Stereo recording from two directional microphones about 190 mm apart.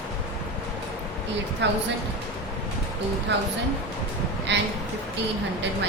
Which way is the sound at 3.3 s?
65° right (ahead or behind).